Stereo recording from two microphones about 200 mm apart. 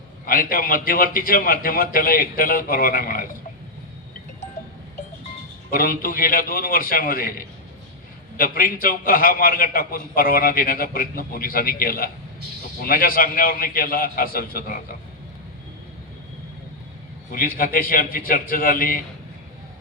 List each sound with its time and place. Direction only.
0.3 s a man's voice: 45° left (ahead or behind)
5.7 s a man's voice: 45° left (ahead or behind)
17.3 s a man's voice: 45° left (ahead or behind)